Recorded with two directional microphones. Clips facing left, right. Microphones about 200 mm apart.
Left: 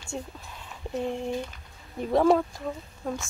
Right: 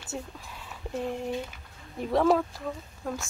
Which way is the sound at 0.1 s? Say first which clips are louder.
Left 1 dB; 5° right (ahead or behind).